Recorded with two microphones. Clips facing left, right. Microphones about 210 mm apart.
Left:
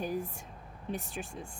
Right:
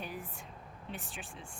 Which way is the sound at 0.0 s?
45° left (ahead or behind).